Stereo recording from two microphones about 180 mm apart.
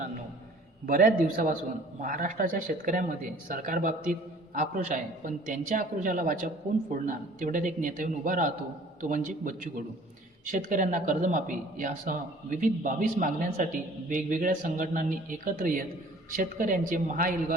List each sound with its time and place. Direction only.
0.9 s speech: 50° right (ahead or behind)